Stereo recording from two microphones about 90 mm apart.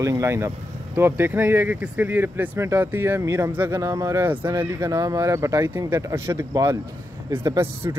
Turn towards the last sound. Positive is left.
turn(degrees=-25)  # may be behind; listen again after turning